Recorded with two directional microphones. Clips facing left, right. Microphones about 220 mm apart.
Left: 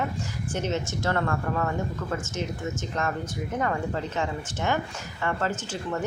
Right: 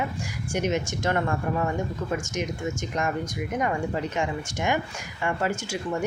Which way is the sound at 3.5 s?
15° right (ahead or behind).